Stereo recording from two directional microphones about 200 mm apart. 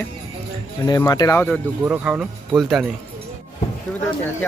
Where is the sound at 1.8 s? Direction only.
5° right (ahead or behind).